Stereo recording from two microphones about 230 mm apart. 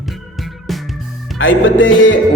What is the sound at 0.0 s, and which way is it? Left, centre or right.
Music, centre.